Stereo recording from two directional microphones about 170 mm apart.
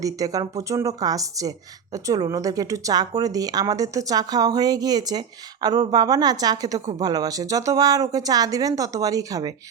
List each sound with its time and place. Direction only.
0.0 s a woman's voice: 20° right (ahead or behind)